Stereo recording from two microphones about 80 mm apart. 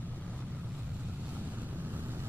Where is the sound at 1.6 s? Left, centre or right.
Right.